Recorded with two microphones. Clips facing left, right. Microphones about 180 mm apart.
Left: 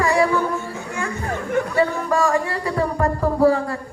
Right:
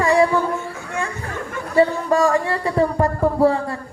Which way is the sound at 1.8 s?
25° right (ahead or behind).